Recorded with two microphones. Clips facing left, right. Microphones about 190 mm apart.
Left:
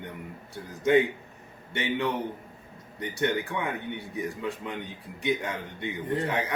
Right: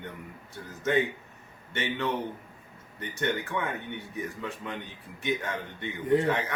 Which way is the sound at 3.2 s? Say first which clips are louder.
Left 2 dB; 15° left (ahead or behind).